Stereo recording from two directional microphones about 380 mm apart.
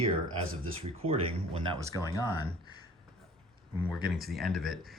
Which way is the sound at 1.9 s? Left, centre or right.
Centre.